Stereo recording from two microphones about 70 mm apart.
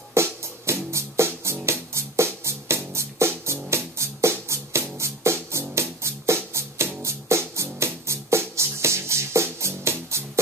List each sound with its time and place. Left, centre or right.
0.1 s music: right